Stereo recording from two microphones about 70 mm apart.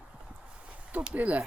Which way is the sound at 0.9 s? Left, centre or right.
Right.